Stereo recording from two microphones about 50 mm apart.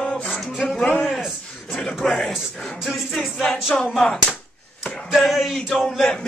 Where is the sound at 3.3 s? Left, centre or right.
Centre.